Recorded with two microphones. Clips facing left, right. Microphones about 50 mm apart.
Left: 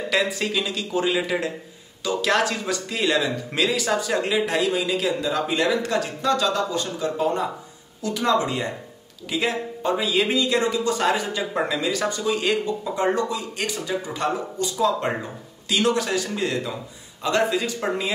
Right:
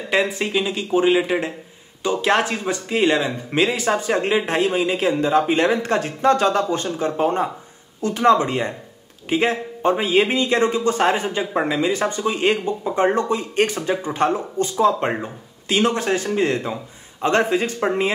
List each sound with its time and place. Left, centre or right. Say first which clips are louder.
0.1 s speech: right 4 dB; right